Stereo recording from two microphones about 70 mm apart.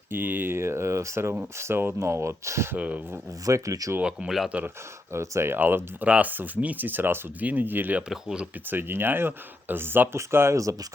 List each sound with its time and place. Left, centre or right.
0.1 s speech: right
2.7 s speech: centre
3.4 s speech: right
4.0 s speech: centre
5.1 s speech: right
5.5 s speech: right
8.1 s speech: centre
8.6 s speech: right